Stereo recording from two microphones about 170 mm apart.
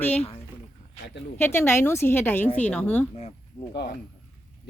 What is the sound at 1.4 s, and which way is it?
A woman's voice, 15° left (ahead or behind).